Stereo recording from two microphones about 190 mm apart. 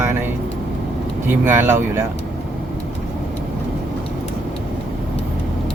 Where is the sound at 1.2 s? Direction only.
10° right (ahead or behind).